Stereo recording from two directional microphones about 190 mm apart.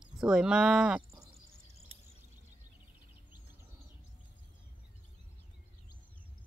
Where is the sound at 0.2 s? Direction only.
5° right (ahead or behind).